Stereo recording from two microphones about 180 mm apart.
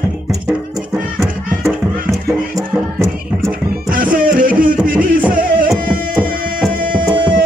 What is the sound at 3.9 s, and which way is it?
Music, 50° right (ahead or behind).